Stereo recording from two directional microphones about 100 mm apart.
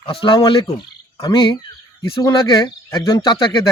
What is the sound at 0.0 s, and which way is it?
Speech, 60° left (ahead or behind).